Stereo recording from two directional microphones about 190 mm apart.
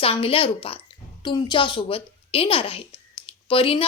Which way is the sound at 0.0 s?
30° left (ahead or behind).